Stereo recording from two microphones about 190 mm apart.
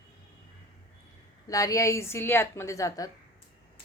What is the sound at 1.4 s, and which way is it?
A woman's voice, 15° left (ahead or behind).